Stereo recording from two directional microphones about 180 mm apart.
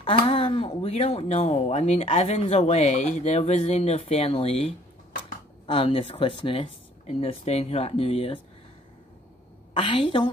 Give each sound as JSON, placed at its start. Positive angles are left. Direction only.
{"t": 0.0, "sound": "speech", "side_deg": 30}
{"t": 9.8, "sound": "a woman's voice", "side_deg": 30}